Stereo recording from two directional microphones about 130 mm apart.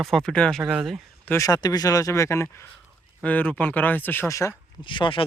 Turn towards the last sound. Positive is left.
turn(degrees=40)  # may be behind; listen again after turning